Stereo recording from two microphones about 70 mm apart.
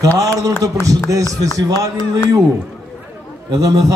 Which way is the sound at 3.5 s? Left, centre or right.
Right.